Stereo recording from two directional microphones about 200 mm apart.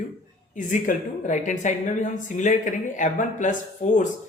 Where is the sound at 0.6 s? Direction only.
40° left (ahead or behind).